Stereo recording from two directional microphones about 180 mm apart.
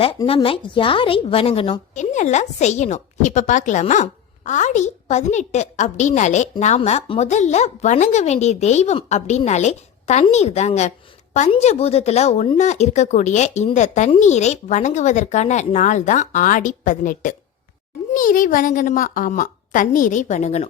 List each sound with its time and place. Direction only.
0.3 s a woman's voice: 30° left (ahead or behind)